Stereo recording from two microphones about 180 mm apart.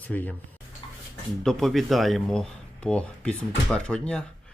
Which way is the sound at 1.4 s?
Centre (ahead or behind).